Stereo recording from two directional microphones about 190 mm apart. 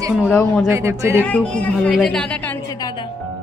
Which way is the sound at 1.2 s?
5° left (ahead or behind).